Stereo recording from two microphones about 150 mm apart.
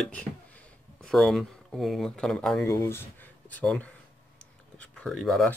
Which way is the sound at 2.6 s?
20° left (ahead or behind).